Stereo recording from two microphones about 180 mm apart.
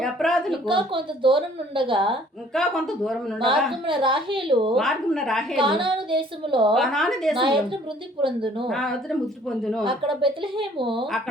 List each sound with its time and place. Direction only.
0.0 s a woman's voice: centre (ahead or behind)
0.6 s a woman's voice: 30° right (ahead or behind)
2.5 s a woman's voice: centre (ahead or behind)
3.8 s a woman's voice: 30° right (ahead or behind)
4.7 s a woman's voice: centre (ahead or behind)
5.5 s a woman's voice: 30° right (ahead or behind)
6.7 s a woman's voice: centre (ahead or behind)
7.3 s a woman's voice: 30° right (ahead or behind)
8.6 s a woman's voice: centre (ahead or behind)
9.8 s a woman's voice: 30° right (ahead or behind)